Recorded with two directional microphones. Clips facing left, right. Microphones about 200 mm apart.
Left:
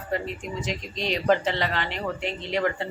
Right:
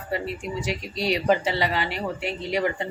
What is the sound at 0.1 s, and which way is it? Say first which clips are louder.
Speech: right 1 dB; 10° right (ahead or behind).